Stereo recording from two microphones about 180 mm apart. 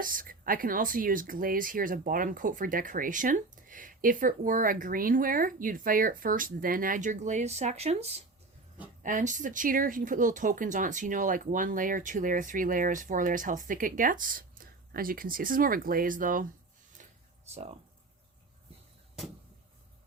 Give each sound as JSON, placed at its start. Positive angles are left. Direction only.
{"t": 0.0, "sound": "speech", "side_deg": -50}
{"t": 9.0, "sound": "speech", "side_deg": -45}
{"t": 17.0, "sound": "a sound", "side_deg": -45}
{"t": 17.5, "sound": "speech", "side_deg": -35}